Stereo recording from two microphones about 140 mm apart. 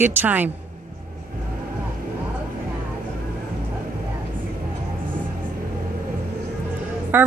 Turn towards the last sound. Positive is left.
turn(degrees=-15)  # may be behind; listen again after turning